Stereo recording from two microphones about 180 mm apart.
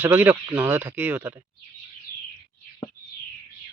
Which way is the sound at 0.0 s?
10° right (ahead or behind).